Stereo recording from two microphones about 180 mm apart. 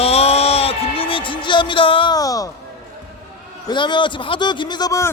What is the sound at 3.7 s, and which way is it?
A man's voice, 25° left (ahead or behind).